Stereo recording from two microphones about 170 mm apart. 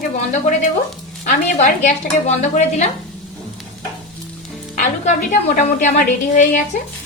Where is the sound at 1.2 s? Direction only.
45° left (ahead or behind).